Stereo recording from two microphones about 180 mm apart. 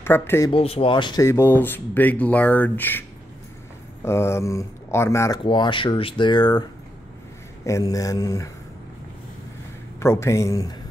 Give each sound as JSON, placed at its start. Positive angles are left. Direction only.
{"t": 0.0, "sound": "speech", "side_deg": 15}
{"t": 0.5, "sound": "speech", "side_deg": 30}
{"t": 5.4, "sound": "speech", "side_deg": 25}
{"t": 7.6, "sound": "speech", "side_deg": 15}
{"t": 9.9, "sound": "speech", "side_deg": 15}